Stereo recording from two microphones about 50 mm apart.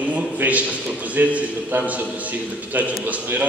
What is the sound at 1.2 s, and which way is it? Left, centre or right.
Speech, right.